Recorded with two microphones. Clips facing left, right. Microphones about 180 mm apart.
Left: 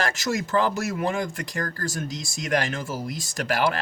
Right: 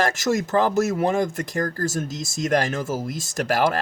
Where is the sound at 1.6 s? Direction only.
25° right (ahead or behind).